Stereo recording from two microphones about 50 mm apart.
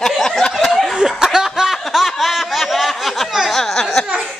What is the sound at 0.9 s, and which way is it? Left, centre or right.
Snicker, centre.